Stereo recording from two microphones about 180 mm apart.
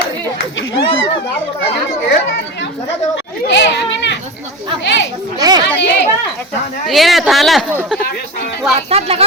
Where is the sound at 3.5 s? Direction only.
90° left.